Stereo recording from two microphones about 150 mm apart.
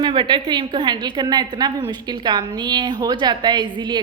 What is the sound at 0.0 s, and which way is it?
A woman's voice, 30° right (ahead or behind).